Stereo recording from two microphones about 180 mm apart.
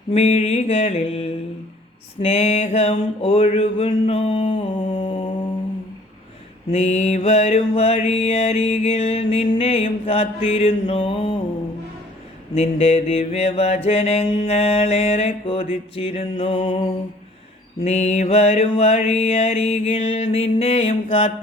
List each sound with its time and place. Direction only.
0.1 s mantra: 35° left (ahead or behind)
6.7 s mantra: 35° left (ahead or behind)
12.5 s mantra: 35° left (ahead or behind)
17.8 s mantra: 40° left (ahead or behind)